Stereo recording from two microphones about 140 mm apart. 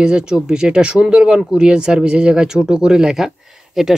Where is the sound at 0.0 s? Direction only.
5° right (ahead or behind).